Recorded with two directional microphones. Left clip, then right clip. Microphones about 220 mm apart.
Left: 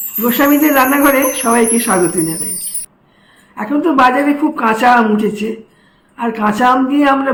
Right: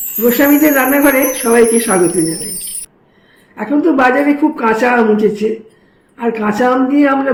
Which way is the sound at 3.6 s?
15° left (ahead or behind).